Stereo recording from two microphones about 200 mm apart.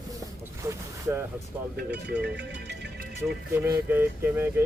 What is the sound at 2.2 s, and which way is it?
Speech, 60° right (ahead or behind).